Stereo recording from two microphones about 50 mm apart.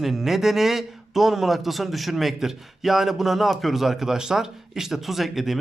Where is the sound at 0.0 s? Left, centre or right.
Centre.